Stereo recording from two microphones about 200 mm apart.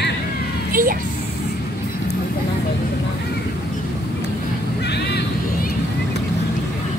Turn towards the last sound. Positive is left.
turn(degrees=55)  # may be behind; listen again after turning